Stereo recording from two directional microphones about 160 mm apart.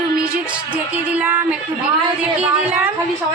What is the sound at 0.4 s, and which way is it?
Music, 10° right (ahead or behind).